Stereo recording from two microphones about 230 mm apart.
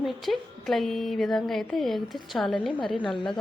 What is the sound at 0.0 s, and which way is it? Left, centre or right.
Speech, centre.